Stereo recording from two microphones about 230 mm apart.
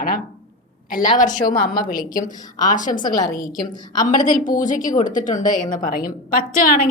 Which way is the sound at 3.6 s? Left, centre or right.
Left.